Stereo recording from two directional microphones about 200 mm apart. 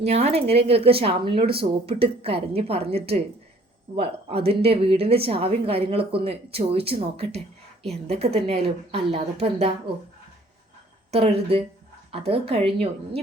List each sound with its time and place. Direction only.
0.0 s a woman's voice: 30° right (ahead or behind)
11.1 s speech: 30° right (ahead or behind)